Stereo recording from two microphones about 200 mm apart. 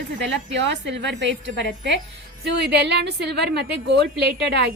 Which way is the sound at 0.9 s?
60° right (ahead or behind).